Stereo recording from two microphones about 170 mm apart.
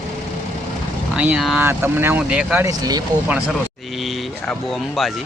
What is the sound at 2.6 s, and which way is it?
Speech, 20° right (ahead or behind).